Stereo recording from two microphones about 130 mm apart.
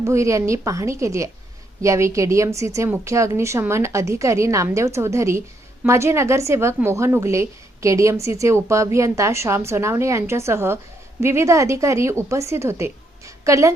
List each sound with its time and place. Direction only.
0.0 s a woman's voice: 25° right (ahead or behind)